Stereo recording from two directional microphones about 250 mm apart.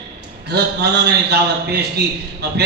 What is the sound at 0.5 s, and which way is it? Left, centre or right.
A man's voice, right.